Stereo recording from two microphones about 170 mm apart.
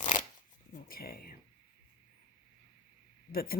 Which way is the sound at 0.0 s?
50° left (ahead or behind).